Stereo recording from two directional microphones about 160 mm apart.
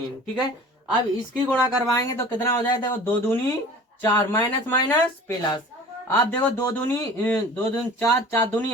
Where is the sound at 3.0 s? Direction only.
10° left (ahead or behind).